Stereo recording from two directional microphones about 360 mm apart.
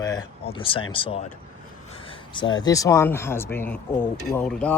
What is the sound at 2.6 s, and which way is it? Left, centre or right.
Speech, centre.